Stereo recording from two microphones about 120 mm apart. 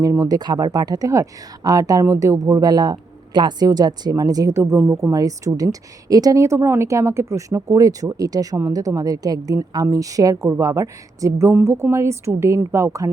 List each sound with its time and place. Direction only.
0.0 s speech: 30° right (ahead or behind)